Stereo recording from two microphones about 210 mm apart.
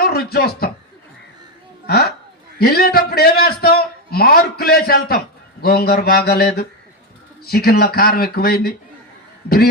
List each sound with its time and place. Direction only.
0.0 s speech: 45° left (ahead or behind)
2.6 s a man's voice: 45° left (ahead or behind)